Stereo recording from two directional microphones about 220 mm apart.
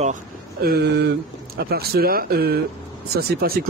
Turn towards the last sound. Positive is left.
turn(degrees=-45)  # may be behind; listen again after turning